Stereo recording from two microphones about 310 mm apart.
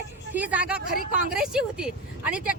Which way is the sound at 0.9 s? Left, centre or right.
Right.